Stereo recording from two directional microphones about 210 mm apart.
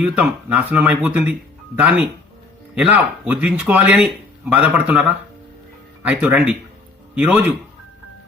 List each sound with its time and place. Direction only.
0.0 s speech: 5° right (ahead or behind)